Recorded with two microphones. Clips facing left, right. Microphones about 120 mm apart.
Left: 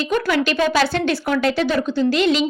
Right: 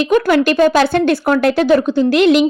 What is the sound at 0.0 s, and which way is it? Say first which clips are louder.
Speech: right 7 dB; 55° right (ahead or behind).